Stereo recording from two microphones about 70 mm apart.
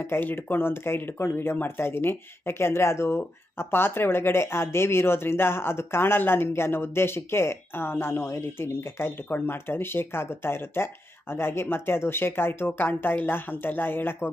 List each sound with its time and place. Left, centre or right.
0.0 s speech: left